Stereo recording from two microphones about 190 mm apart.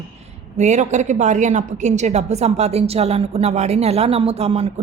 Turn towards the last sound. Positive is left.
turn(degrees=-30)  # may be behind; listen again after turning